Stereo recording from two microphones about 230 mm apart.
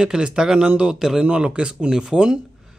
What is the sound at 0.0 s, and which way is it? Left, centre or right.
Speech, centre.